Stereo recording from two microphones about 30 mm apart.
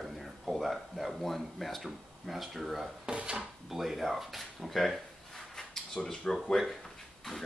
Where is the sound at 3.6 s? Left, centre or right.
Centre.